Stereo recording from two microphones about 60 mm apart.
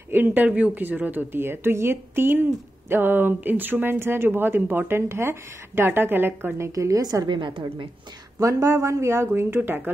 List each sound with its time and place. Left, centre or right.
0.1 s speech: right
6.7 s a woman's voice: right
8.4 s speech: right
9.3 s speech: right